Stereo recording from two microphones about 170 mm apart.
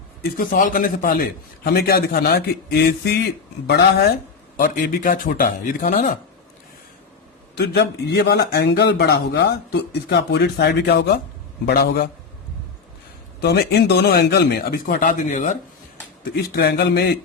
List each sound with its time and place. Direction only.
0.2 s a man's voice: 55° left (ahead or behind); by 4.1 s 75° left (ahead or behind)
4.5 s a man's voice: 55° left (ahead or behind)
7.5 s a man's voice: 75° left (ahead or behind)
13.4 s a man's voice: 70° left (ahead or behind); by 15.5 s 45° left (ahead or behind)
16.3 s a man's voice: 65° left (ahead or behind)